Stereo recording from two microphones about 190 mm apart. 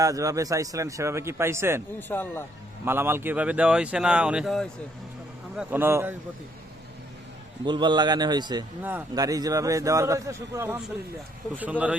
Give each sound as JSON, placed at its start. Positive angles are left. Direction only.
{"t": 0.0, "sound": "speech", "side_deg": -20}
{"t": 2.0, "sound": "speech", "side_deg": 10}
{"t": 2.8, "sound": "speech", "side_deg": -10}
{"t": 5.5, "sound": "speech", "side_deg": -10}
{"t": 7.6, "sound": "a man's voice", "side_deg": -25}
{"t": 8.8, "sound": "speech", "side_deg": -10}